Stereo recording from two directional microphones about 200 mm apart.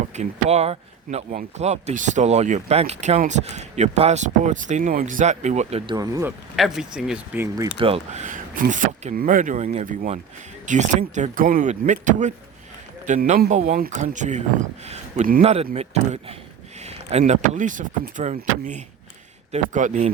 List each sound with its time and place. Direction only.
0.2 s speech: 35° right (ahead or behind); by 6.3 s 15° right (ahead or behind)
6.6 s speech: centre (ahead or behind)
7.8 s speech: 30° right (ahead or behind)